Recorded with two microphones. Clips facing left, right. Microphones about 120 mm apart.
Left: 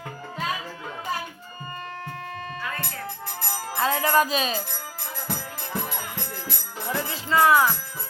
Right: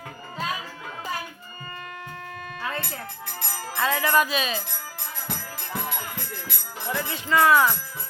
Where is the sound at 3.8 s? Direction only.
35° left (ahead or behind).